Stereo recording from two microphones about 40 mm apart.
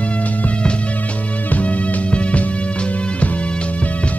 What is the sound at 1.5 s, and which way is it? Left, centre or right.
Music, left.